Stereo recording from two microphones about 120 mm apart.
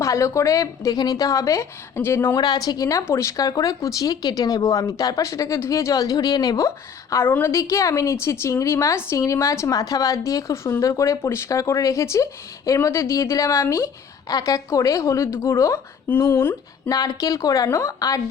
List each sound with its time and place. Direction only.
0.0 s speech: 25° left (ahead or behind)
2.3 s speech: 35° left (ahead or behind); by 16.9 s 15° left (ahead or behind)
16.9 s speech: 30° left (ahead or behind)